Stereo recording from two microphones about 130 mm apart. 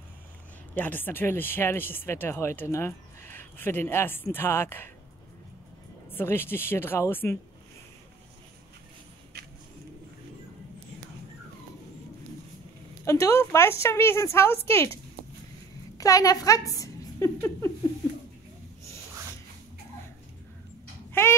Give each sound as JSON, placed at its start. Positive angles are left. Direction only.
{"t": 0.7, "sound": "speech", "side_deg": 15}
{"t": 6.0, "sound": "speech", "side_deg": 15}
{"t": 13.0, "sound": "a woman's voice", "side_deg": 25}
{"t": 16.0, "sound": "a woman's voice", "side_deg": 25}
{"t": 21.1, "sound": "a sound", "side_deg": 20}